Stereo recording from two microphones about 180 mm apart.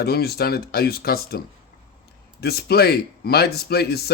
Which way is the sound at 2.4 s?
60° left (ahead or behind).